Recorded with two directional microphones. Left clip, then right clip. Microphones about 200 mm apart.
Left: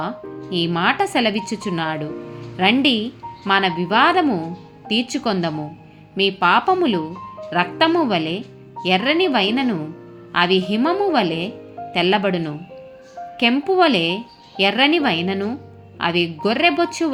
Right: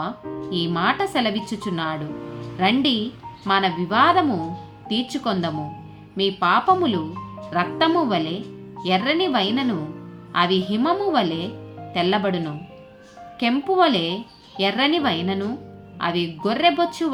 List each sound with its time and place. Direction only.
0.5 s speech: 15° left (ahead or behind)